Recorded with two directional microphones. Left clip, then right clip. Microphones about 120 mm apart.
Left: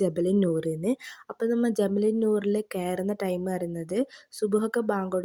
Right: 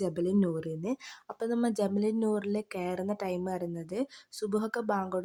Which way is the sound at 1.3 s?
20° left (ahead or behind).